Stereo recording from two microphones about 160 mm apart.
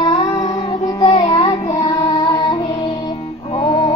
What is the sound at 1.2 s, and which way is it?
Child singing, 20° left (ahead or behind).